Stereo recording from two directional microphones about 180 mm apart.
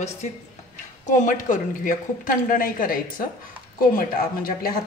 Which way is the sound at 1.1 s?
45° left (ahead or behind).